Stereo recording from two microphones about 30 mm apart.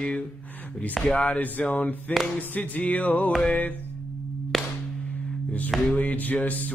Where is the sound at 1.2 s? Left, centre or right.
Left.